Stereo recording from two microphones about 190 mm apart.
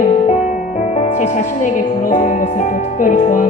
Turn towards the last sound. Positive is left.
turn(degrees=45)  # may be behind; listen again after turning